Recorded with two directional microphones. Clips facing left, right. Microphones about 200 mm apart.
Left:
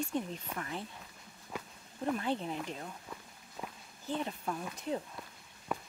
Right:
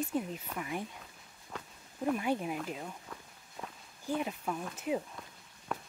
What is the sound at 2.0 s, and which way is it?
Speech, 10° right (ahead or behind).